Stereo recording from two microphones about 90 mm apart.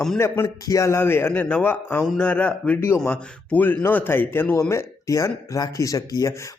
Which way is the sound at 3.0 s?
15° left (ahead or behind).